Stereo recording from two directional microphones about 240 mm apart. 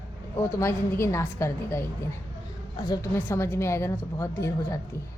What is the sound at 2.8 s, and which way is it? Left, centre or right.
Speech, centre.